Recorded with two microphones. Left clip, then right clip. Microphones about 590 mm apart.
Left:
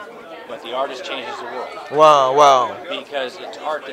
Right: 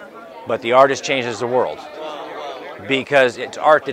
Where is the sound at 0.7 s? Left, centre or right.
Right.